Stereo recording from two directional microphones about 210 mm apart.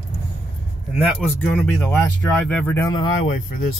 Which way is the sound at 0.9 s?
Centre (ahead or behind).